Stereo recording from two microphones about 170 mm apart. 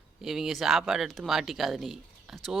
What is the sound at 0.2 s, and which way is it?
Speech, centre (ahead or behind).